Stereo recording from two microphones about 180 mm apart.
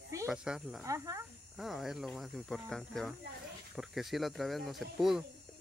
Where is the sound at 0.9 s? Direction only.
15° right (ahead or behind).